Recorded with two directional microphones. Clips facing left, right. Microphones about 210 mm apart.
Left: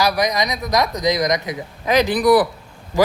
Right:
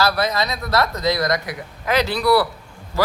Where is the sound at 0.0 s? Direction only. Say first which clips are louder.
Left 1 dB; 15° left (ahead or behind).